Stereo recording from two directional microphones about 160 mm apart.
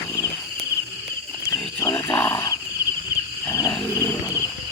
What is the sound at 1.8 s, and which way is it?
Wild animals, 30° left (ahead or behind).